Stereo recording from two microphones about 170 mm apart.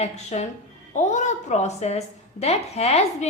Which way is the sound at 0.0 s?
40° left (ahead or behind).